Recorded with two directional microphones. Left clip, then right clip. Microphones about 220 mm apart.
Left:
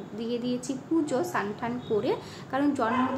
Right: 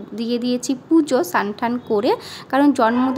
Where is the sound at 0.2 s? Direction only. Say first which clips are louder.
Right 9 dB; 55° right (ahead or behind).